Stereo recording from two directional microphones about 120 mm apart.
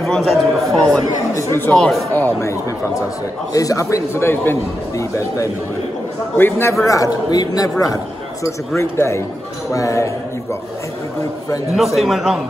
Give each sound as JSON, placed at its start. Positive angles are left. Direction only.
{"t": 0.0, "sound": "a man's voice", "side_deg": 5}
{"t": 2.1, "sound": "a man's voice", "side_deg": 15}
{"t": 3.5, "sound": "a man's voice", "side_deg": 30}
{"t": 11.7, "sound": "a man's voice", "side_deg": 0}